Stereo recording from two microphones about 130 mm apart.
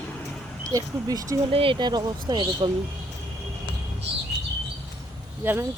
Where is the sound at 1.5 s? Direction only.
45° right (ahead or behind).